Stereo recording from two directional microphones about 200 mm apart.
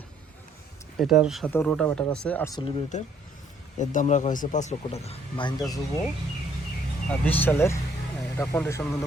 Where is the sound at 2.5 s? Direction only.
25° left (ahead or behind).